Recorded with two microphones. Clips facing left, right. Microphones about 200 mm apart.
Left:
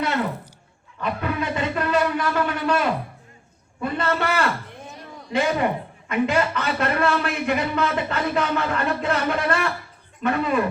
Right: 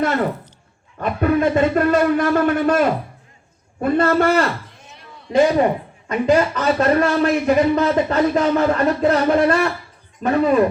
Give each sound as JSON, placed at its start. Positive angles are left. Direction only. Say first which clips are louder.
{"t": 0.9, "sound": "speech", "louder": "right 8 dB", "side_deg": -45}